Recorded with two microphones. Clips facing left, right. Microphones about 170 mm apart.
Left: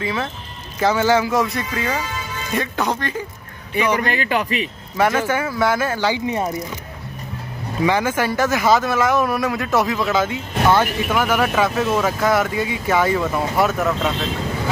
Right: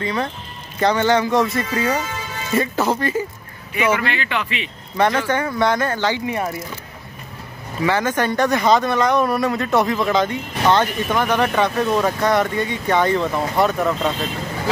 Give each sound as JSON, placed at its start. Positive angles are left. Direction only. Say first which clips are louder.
{"t": 0.0, "sound": "speech", "louder": "right 1 dB", "side_deg": 5}
{"t": 3.7, "sound": "speech", "louder": "even", "side_deg": 40}
{"t": 4.9, "sound": "speech", "louder": "even", "side_deg": 5}
{"t": 7.8, "sound": "speech", "louder": "even", "side_deg": 10}